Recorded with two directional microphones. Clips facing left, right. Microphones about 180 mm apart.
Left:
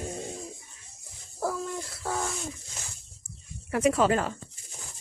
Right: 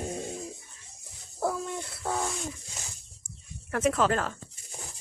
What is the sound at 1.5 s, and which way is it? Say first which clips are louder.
Bird: even; centre (ahead or behind).